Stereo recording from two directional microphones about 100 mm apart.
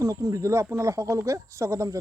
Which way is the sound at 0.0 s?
35° right (ahead or behind).